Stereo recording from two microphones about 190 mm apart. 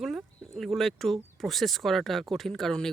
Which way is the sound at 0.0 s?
Centre (ahead or behind).